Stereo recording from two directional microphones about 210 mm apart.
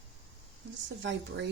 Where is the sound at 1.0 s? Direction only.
55° right (ahead or behind).